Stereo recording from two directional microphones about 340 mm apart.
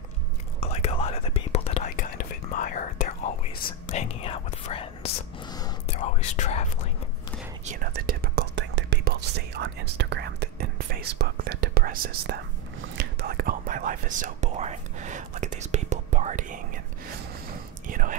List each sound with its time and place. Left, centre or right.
0.6 s whispering: centre
7.6 s whispering: right
12.9 s speech: right
17.8 s speech: right